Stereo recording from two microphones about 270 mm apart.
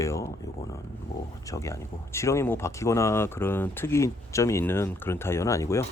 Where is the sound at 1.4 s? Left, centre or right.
Centre.